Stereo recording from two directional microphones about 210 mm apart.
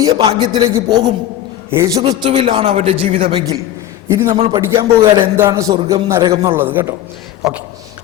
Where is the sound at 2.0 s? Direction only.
25° right (ahead or behind).